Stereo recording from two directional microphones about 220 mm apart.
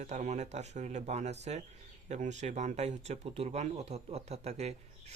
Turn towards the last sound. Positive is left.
turn(degrees=-30)  # may be behind; listen again after turning